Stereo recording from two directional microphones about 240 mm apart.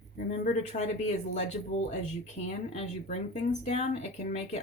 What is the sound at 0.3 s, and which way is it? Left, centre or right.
A woman's voice, left.